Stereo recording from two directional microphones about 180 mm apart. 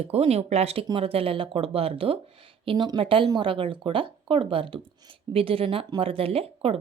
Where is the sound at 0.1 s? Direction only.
35° right (ahead or behind).